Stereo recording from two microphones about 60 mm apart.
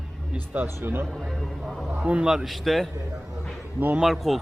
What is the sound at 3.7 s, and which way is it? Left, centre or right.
Speech, right.